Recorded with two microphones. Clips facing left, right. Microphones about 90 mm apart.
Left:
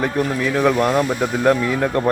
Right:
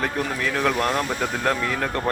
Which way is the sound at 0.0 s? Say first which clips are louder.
Left 5 dB; 5° left (ahead or behind).